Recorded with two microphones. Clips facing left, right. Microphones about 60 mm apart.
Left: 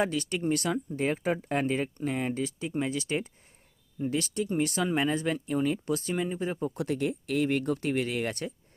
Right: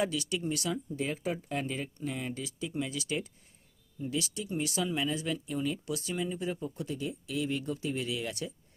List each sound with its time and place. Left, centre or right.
0.0 s speech: left
6.7 s speech: left